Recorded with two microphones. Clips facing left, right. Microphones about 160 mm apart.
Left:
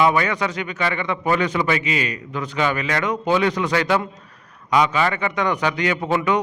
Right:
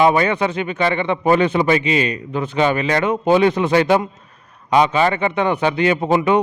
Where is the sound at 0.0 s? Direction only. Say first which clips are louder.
Right 4 dB; 25° right (ahead or behind).